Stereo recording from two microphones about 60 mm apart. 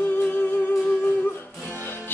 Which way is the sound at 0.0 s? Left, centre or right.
Left.